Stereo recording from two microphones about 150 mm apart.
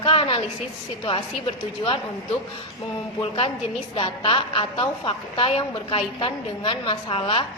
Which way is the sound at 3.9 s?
35° left (ahead or behind).